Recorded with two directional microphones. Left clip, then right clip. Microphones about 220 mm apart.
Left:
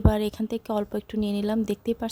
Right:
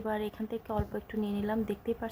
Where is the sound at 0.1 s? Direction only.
50° left (ahead or behind).